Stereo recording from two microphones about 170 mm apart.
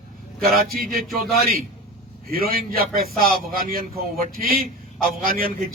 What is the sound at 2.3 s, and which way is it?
A man's voice, 60° right (ahead or behind).